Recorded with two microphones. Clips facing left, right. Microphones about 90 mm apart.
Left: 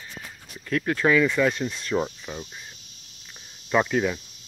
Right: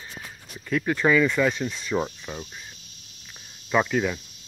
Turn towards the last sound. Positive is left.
turn(degrees=0)  # may be behind; listen again after turning